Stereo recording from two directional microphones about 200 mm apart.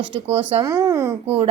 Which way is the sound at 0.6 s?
15° right (ahead or behind).